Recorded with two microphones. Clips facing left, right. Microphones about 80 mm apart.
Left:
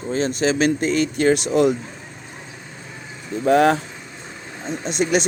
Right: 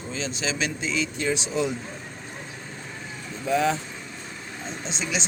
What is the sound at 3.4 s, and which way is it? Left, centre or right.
Speech, left.